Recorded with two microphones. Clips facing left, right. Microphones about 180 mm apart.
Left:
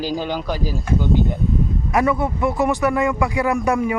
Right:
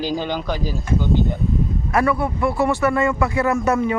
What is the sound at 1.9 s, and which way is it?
A man's voice, 20° left (ahead or behind).